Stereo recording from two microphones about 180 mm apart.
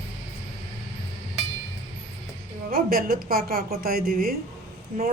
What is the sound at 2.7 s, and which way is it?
Speech, 55° right (ahead or behind).